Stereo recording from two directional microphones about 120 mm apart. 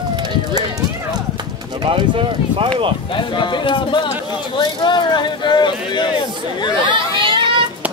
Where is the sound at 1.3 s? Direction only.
40° right (ahead or behind).